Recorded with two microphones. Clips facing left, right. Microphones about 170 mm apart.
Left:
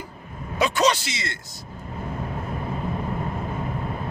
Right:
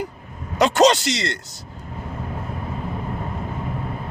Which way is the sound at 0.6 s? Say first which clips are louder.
Right 6 dB; 75° right (ahead or behind).